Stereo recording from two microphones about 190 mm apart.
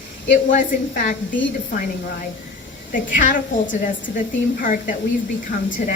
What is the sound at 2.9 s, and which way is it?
A woman's voice, 45° left (ahead or behind).